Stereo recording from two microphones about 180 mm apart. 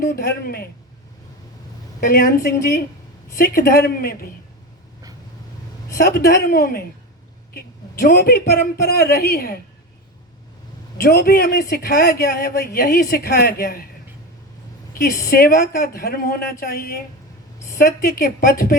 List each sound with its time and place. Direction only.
0.0 s speech: 55° left (ahead or behind)
2.0 s speech: 55° left (ahead or behind)
6.0 s speech: 55° left (ahead or behind)
10.9 s speech: 55° left (ahead or behind)
14.9 s speech: 55° left (ahead or behind)